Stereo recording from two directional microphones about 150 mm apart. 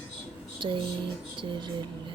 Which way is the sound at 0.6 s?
30° right (ahead or behind).